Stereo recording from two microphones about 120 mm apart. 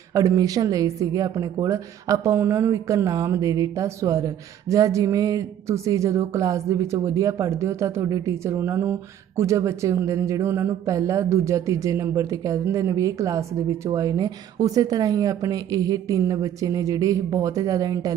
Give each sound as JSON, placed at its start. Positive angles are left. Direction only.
{"t": 0.1, "sound": "speech", "side_deg": -25}